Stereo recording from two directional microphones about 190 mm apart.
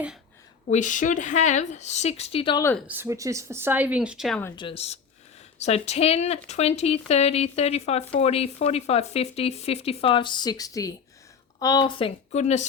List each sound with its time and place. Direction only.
0.7 s speech: 40° left (ahead or behind)
2.8 s speech: 10° right (ahead or behind)
4.5 s speech: 30° left (ahead or behind)